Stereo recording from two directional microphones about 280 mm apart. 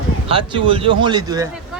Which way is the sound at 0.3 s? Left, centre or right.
Centre.